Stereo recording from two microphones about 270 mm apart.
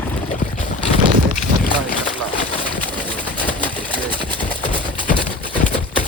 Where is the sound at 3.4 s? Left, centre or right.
Centre.